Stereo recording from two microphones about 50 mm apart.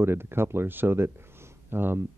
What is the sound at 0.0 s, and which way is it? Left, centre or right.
Speech, right.